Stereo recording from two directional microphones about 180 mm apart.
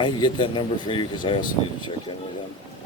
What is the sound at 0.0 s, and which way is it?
Speech, 25° left (ahead or behind).